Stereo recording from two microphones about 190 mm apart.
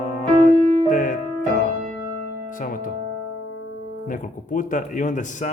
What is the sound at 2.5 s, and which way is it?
Speech, 45° left (ahead or behind).